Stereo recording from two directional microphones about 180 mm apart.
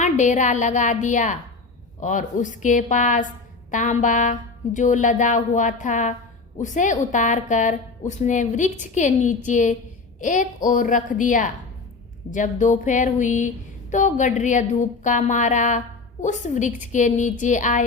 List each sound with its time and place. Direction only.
0.0 s a woman's voice: 40° left (ahead or behind)